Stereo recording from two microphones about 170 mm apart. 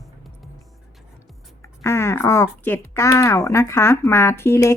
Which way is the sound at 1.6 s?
15° left (ahead or behind).